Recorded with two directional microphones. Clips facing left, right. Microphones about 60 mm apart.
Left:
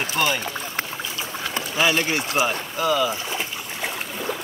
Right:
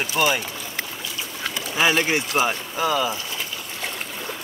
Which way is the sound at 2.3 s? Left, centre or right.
Centre.